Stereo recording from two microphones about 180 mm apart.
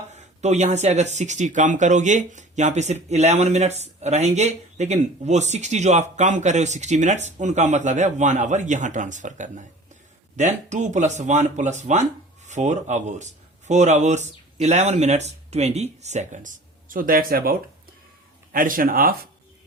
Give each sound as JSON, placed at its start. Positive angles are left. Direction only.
{"t": 0.4, "sound": "speech", "side_deg": -40}